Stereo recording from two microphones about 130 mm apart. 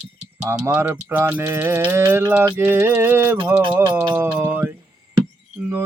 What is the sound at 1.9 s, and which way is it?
Music, 20° right (ahead or behind).